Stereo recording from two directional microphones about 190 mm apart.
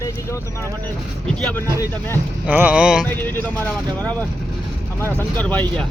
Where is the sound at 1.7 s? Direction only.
15° left (ahead or behind).